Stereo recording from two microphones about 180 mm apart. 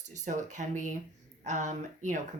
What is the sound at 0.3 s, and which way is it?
Speech, 40° right (ahead or behind).